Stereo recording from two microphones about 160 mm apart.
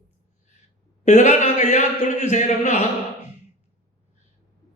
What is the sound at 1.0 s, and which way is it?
A man's voice, 50° left (ahead or behind).